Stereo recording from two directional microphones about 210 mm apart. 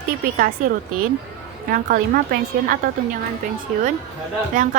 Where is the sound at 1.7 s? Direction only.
45° right (ahead or behind).